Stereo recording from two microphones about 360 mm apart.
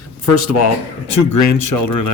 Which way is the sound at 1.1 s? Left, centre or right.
Left.